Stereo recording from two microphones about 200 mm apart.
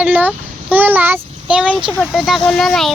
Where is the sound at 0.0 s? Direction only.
10° right (ahead or behind).